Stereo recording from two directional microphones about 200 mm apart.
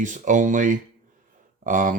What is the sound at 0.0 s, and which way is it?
Speech, 40° right (ahead or behind).